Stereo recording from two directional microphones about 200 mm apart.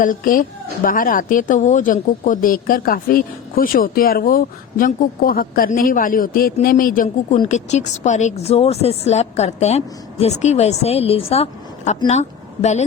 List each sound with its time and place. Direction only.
0.0 s a woman's voice: 40° left (ahead or behind)